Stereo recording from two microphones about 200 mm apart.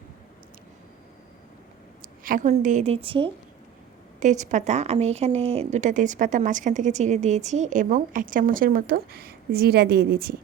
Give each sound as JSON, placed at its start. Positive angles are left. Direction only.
{"t": 2.2, "sound": "a woman's voice", "side_deg": -40}
{"t": 4.2, "sound": "a woman's voice", "side_deg": -35}